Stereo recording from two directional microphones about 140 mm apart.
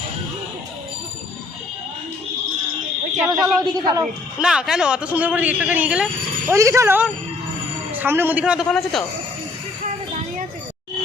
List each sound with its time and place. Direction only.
3.2 s a man's voice: 25° right (ahead or behind)
4.0 s a man's voice: 5° right (ahead or behind)
6.5 s a man's voice: 20° right (ahead or behind)
8.7 s a man's voice: centre (ahead or behind)